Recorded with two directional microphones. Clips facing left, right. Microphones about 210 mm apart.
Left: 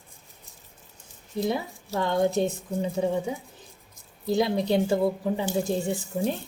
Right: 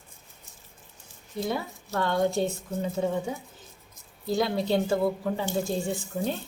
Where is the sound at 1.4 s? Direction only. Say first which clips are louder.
Left 3 dB; 20° left (ahead or behind).